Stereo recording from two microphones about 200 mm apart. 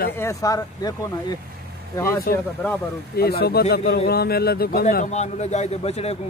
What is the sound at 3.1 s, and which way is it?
Speech, 50° left (ahead or behind).